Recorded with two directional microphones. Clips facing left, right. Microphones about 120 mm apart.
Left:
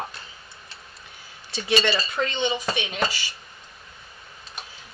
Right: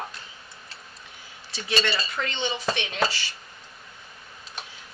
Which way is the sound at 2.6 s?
10° left (ahead or behind).